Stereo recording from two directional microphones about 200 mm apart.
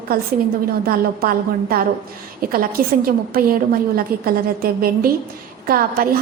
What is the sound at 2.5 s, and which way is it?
A woman's voice, 45° right (ahead or behind).